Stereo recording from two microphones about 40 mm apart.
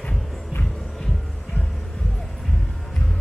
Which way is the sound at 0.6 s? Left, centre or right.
Centre.